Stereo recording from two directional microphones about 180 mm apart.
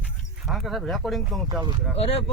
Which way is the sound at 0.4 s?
Centre (ahead or behind).